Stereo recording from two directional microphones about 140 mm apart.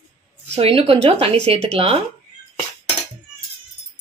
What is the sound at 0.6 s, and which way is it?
Speech, 40° right (ahead or behind).